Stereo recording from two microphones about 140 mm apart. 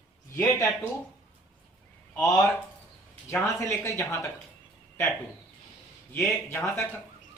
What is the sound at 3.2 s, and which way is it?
Speech, 20° left (ahead or behind).